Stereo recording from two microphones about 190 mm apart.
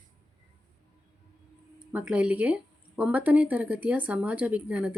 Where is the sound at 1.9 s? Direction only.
5° right (ahead or behind).